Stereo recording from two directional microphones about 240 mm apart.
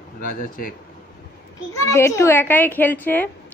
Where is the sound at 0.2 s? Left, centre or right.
Left.